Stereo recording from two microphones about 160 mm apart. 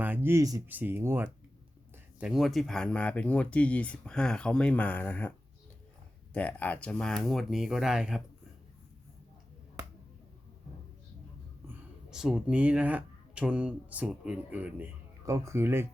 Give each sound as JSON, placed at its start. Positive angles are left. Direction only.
{"t": 0.0, "sound": "speech", "side_deg": -15}
{"t": 6.3, "sound": "speech", "side_deg": 10}
{"t": 11.7, "sound": "speech", "side_deg": -5}